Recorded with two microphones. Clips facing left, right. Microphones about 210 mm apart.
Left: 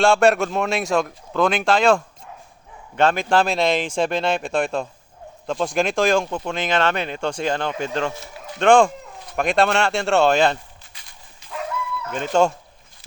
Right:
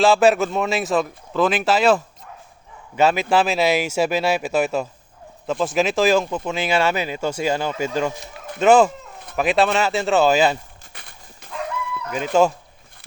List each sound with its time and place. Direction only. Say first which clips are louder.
0.0 s speech: right 1 dB; centre (ahead or behind)
8.5 s speech: right 1 dB; 5° right (ahead or behind)
10.9 s dog: right 7 dB; 60° right (ahead or behind)
12.1 s speech: right 1 dB; 5° right (ahead or behind)